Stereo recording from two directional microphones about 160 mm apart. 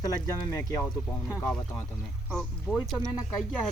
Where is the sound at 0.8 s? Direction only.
5° left (ahead or behind).